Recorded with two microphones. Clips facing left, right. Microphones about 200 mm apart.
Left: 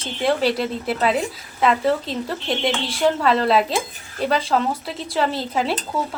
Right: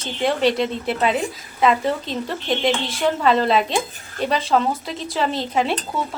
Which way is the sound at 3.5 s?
5° left (ahead or behind).